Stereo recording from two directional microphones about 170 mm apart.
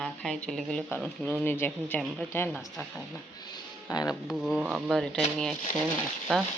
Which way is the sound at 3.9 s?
20° left (ahead or behind).